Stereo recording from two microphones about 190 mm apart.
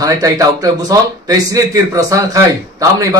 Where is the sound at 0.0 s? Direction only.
15° right (ahead or behind).